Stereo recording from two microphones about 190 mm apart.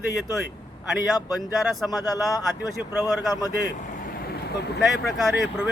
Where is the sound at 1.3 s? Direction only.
Centre (ahead or behind).